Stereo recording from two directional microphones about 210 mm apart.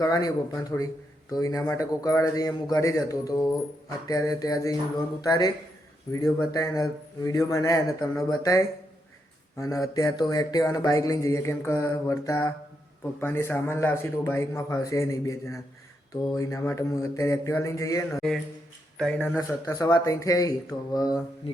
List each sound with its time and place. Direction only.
0.0 s speech: 15° left (ahead or behind)
18.1 s speech: centre (ahead or behind)
19.4 s speech: 15° left (ahead or behind)